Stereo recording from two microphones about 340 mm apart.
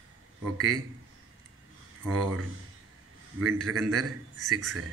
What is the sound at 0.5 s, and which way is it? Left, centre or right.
Speech, right.